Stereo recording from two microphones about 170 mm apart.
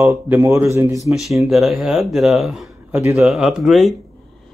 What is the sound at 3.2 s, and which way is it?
Speech, 5° right (ahead or behind).